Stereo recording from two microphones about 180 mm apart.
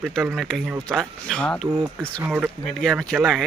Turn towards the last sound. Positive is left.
turn(degrees=0)  # may be behind; listen again after turning